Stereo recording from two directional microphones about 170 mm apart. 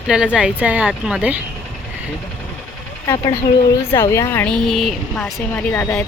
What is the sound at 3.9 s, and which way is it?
Speech, 20° left (ahead or behind).